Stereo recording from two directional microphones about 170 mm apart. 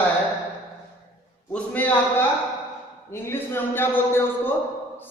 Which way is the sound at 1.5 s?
10° left (ahead or behind).